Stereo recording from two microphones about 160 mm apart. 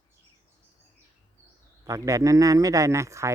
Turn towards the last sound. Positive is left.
turn(degrees=-20)  # may be behind; listen again after turning